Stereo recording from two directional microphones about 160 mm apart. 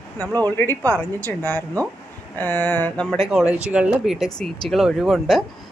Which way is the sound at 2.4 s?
10° left (ahead or behind).